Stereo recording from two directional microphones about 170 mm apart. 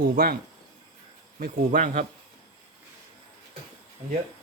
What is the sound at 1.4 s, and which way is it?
Speech, 55° right (ahead or behind).